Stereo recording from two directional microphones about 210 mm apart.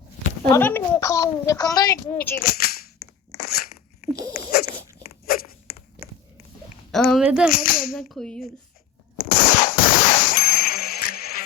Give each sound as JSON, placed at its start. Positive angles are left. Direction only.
{"t": 0.5, "sound": "a woman's voice", "side_deg": 10}
{"t": 2.4, "sound": "speech", "side_deg": 45}
{"t": 3.3, "sound": "crunch", "side_deg": 50}
{"t": 4.1, "sound": "dog", "side_deg": -15}
{"t": 5.2, "sound": "a sound", "side_deg": 45}
{"t": 6.9, "sound": "speech", "side_deg": 0}
{"t": 7.5, "sound": "cap gun", "side_deg": 45}
{"t": 7.9, "sound": "speech", "side_deg": 0}
{"t": 9.1, "sound": "a sound", "side_deg": 45}